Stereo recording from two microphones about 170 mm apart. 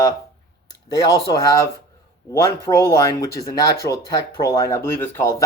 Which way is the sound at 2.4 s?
20° left (ahead or behind).